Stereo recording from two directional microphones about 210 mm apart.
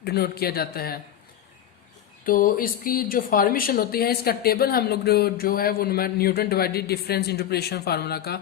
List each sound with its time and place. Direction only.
0.0 s speech: 50° left (ahead or behind)
2.2 s speech: 40° left (ahead or behind)